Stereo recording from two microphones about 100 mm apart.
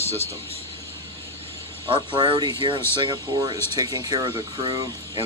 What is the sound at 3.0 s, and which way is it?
Speech, 40° right (ahead or behind).